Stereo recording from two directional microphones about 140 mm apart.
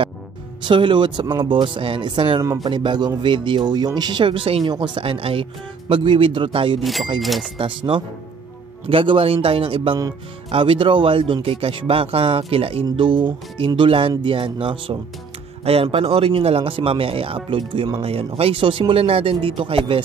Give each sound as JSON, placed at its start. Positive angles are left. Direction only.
{"t": 0.6, "sound": "speech", "side_deg": -35}
{"t": 2.4, "sound": "speech", "side_deg": -25}
{"t": 2.7, "sound": "speech", "side_deg": -35}
{"t": 6.8, "sound": "speech", "side_deg": 0}
{"t": 7.5, "sound": "speech", "side_deg": -40}